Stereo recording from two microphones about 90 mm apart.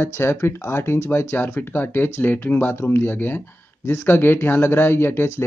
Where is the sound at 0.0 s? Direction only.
25° left (ahead or behind).